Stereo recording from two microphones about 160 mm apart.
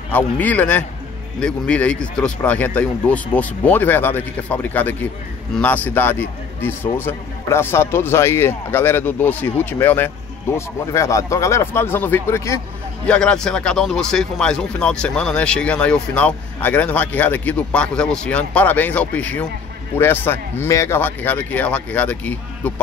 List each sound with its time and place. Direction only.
0.1 s speech: 10° left (ahead or behind)
13.0 s speech: 5° left (ahead or behind)